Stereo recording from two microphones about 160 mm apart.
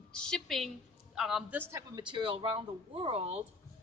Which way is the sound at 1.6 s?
20° right (ahead or behind).